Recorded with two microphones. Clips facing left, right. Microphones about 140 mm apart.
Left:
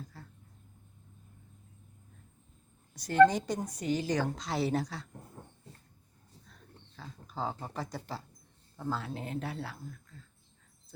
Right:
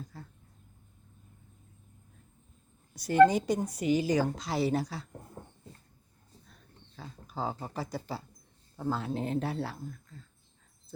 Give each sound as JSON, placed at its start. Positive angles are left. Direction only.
{"t": 0.1, "sound": "speech", "side_deg": -15}
{"t": 2.9, "sound": "a woman's voice", "side_deg": -10}
{"t": 6.9, "sound": "speech", "side_deg": -10}
{"t": 8.7, "sound": "speech", "side_deg": -20}